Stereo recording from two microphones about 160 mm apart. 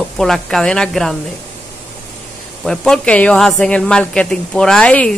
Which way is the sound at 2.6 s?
5° left (ahead or behind).